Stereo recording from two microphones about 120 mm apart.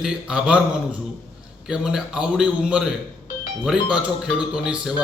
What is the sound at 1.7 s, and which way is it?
A man's voice, 5° right (ahead or behind).